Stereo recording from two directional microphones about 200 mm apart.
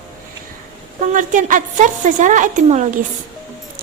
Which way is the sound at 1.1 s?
40° right (ahead or behind).